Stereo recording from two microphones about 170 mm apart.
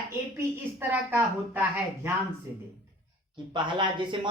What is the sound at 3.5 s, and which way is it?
Speech, 30° right (ahead or behind).